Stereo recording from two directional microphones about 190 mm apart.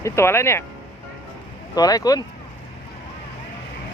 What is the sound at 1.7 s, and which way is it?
Speech, 20° left (ahead or behind).